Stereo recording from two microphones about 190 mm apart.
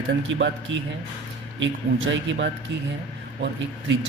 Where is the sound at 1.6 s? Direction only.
80° right.